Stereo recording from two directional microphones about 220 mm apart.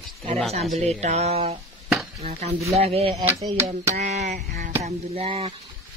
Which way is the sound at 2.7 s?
25° right (ahead or behind).